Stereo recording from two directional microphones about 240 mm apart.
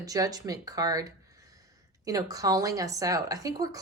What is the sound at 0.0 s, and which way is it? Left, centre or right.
Speech, centre.